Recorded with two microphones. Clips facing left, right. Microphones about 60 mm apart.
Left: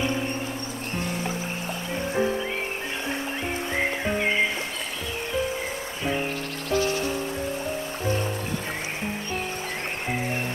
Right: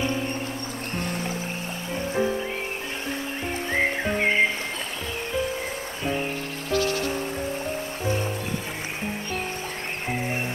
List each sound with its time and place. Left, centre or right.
0.9 s music: right
2.2 s music: centre
6.7 s music: left